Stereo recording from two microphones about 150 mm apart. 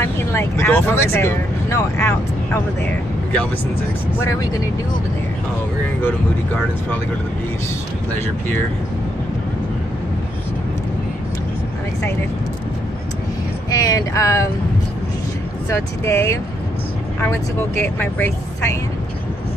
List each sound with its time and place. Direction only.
0.3 s speech: 15° left (ahead or behind)
13.7 s speech: 25° left (ahead or behind)
15.7 s speech: 20° left (ahead or behind)
17.7 s speech: 15° left (ahead or behind)